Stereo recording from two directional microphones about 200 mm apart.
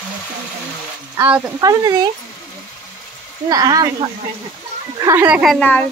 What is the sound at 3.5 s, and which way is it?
Speech, 20° right (ahead or behind).